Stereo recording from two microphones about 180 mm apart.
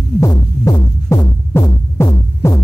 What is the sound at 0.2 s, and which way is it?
Music, 20° left (ahead or behind).